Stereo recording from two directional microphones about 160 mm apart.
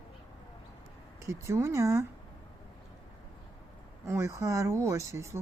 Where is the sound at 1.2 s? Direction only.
15° right (ahead or behind).